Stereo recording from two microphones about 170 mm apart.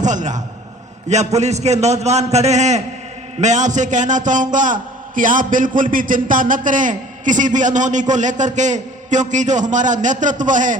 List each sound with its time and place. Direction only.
0.0 s a man's voice: 45° right (ahead or behind)